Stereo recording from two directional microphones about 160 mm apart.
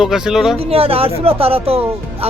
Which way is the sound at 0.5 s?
35° right (ahead or behind).